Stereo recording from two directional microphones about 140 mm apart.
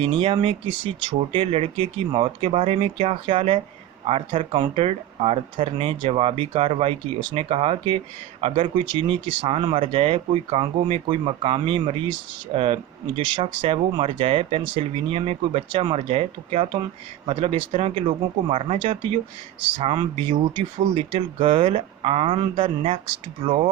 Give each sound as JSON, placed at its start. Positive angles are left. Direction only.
{"t": 0.0, "sound": "speech", "side_deg": -40}